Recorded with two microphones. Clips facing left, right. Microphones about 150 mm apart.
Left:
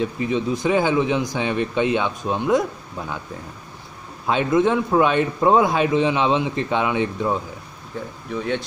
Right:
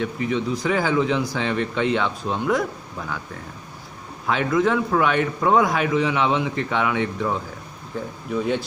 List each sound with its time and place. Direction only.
0.0 s a man's voice: 20° left (ahead or behind)
4.3 s a man's voice: 25° left (ahead or behind)
8.3 s speech: 5° right (ahead or behind)